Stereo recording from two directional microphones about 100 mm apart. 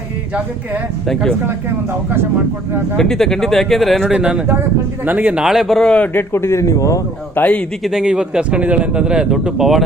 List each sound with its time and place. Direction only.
1.0 s speech: 5° left (ahead or behind)
3.0 s a man's voice: 5° left (ahead or behind); by 7.0 s 30° left (ahead or behind)
7.3 s a man's voice: 15° left (ahead or behind)
7.9 s speech: 5° right (ahead or behind)